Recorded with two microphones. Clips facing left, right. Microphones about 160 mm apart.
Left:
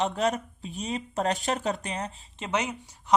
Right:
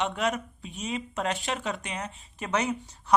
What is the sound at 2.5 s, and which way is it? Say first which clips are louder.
Speech: right 1 dB; 20° left (ahead or behind).